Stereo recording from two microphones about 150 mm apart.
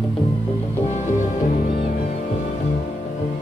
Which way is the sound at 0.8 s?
50° left (ahead or behind).